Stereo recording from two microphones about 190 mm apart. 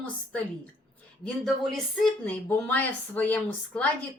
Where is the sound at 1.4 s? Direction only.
Centre (ahead or behind).